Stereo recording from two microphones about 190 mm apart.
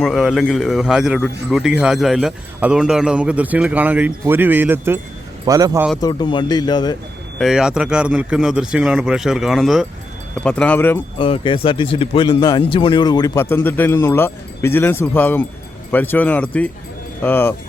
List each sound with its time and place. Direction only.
0.0 s speech: centre (ahead or behind); by 5.8 s 20° right (ahead or behind)
6.0 s speech: 20° left (ahead or behind)
7.3 s speech: centre (ahead or behind)
11.2 s speech: 25° left (ahead or behind); by 17.5 s 10° left (ahead or behind)